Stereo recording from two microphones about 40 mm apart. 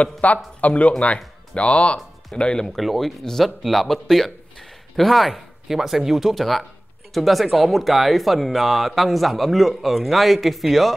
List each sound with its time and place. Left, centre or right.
0.0 s speech: left
2.8 s a man's voice: centre